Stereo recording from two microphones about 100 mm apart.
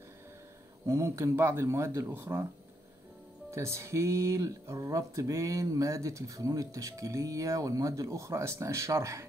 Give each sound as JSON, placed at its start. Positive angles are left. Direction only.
{"t": 0.8, "sound": "speech", "side_deg": -30}
{"t": 3.5, "sound": "speech", "side_deg": -30}